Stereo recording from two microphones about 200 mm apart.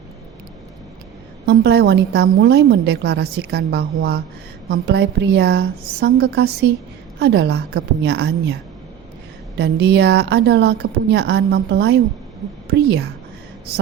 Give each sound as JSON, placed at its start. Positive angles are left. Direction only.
{"t": 1.5, "sound": "a woman's voice", "side_deg": -55}
{"t": 9.6, "sound": "a woman's voice", "side_deg": -55}